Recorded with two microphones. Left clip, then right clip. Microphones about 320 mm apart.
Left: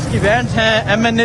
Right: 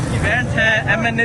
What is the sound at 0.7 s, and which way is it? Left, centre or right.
Speech, left.